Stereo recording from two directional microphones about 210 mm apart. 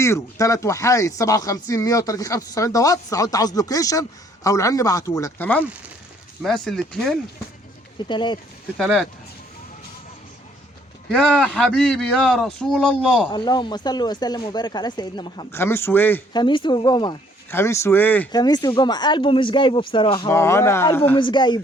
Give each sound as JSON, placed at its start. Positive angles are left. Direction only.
{"t": 0.0, "sound": "a man's voice", "side_deg": 15}
{"t": 7.9, "sound": "speech", "side_deg": 20}
{"t": 8.8, "sound": "a man's voice", "side_deg": 0}
{"t": 11.1, "sound": "a man's voice", "side_deg": 5}
{"t": 13.3, "sound": "speech", "side_deg": 20}
{"t": 16.3, "sound": "speech", "side_deg": 20}
{"t": 18.3, "sound": "speech", "side_deg": 20}
{"t": 21.2, "sound": "speech", "side_deg": 20}